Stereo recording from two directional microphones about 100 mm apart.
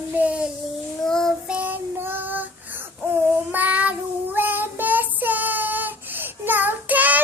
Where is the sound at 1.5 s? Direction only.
15° right (ahead or behind).